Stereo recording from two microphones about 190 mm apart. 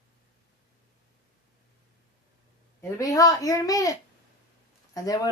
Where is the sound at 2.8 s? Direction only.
15° left (ahead or behind).